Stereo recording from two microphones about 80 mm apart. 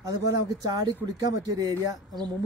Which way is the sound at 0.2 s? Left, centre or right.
Right.